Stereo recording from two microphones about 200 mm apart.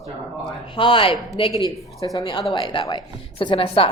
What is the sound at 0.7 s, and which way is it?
A woman's voice, 25° left (ahead or behind).